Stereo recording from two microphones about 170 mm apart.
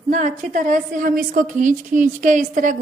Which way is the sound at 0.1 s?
50° right (ahead or behind).